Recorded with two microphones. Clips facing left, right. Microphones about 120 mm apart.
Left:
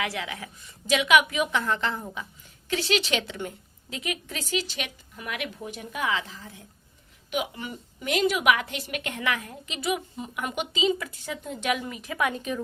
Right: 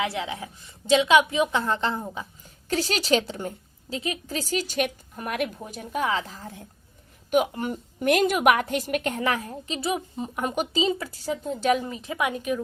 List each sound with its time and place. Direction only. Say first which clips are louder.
0.0 s a woman's voice: right 3 dB; 30° right (ahead or behind)
2.6 s a woman's voice: right 2 dB; 40° right (ahead or behind)
12.1 s speech: right 1 dB; 10° right (ahead or behind)